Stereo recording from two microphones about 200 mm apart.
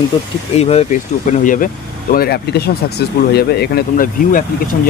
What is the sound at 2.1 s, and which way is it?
Speech, 50° left (ahead or behind).